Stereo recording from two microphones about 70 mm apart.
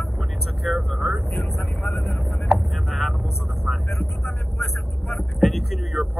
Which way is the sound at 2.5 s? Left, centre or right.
Centre.